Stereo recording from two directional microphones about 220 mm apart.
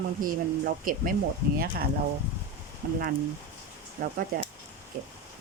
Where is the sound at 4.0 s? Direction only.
40° right (ahead or behind).